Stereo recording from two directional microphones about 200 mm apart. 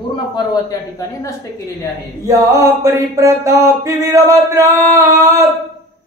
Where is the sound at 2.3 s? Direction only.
15° right (ahead or behind).